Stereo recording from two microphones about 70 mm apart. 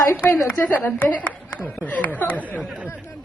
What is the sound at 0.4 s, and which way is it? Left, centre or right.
Speech, left.